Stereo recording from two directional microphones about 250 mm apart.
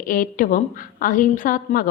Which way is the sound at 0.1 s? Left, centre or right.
Left.